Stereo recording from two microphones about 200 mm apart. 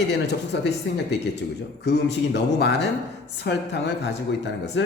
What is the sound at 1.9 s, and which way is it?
Speech, 60° left (ahead or behind).